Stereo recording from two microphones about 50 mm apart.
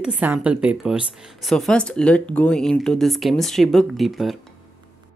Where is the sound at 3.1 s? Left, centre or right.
Centre.